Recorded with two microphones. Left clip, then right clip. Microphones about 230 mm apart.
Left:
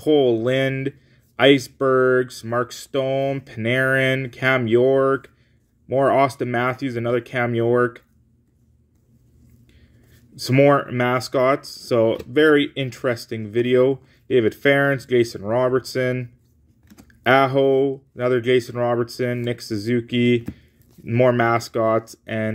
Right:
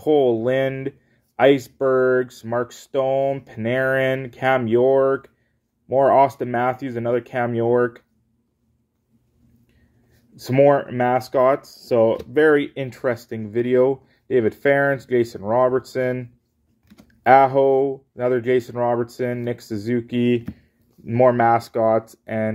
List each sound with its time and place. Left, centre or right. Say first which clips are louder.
0.0 s speech: even; centre
10.3 s speech: even; centre
17.3 s speech: right 3 dB; centre